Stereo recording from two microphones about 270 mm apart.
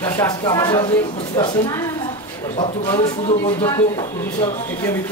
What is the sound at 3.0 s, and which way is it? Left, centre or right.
Speech, left.